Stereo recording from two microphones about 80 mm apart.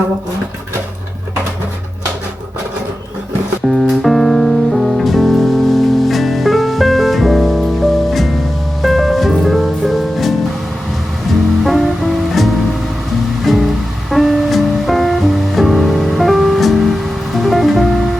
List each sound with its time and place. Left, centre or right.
3.7 s music: centre
11.6 s music: centre